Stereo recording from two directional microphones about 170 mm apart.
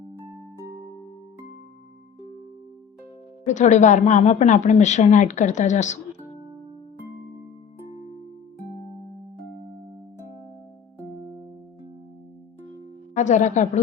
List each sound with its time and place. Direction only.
3.4 s a woman's voice: 45° left (ahead or behind)
13.1 s a woman's voice: 45° left (ahead or behind)